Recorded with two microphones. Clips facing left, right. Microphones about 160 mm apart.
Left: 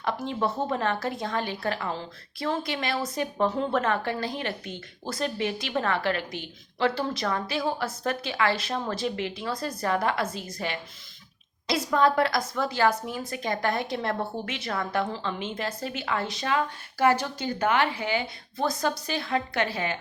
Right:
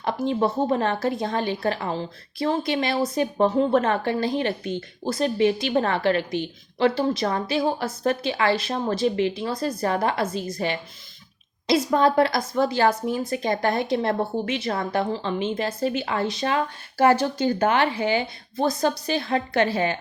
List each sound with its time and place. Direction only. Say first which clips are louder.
0.0 s speech: right 5 dB; 25° right (ahead or behind)